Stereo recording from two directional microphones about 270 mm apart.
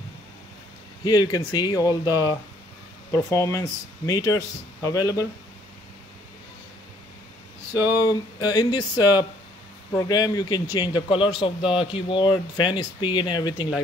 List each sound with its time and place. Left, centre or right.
1.0 s speech: centre
7.7 s speech: centre